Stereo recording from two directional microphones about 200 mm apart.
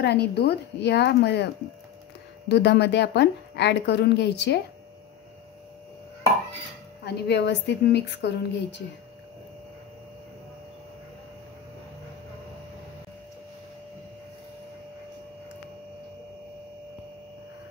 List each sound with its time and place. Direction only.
0.0 s a woman's voice: 55° left (ahead or behind)
7.0 s a woman's voice: 55° left (ahead or behind)